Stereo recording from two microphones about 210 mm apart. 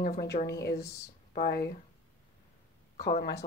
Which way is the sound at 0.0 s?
45° left (ahead or behind).